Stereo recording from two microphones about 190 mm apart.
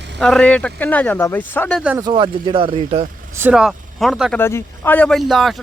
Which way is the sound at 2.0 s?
25° right (ahead or behind).